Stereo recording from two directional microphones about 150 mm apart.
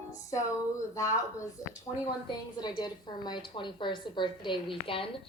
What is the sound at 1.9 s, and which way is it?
A woman's voice, 20° left (ahead or behind).